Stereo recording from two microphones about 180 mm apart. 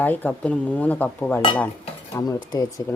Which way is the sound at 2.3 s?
25° left (ahead or behind).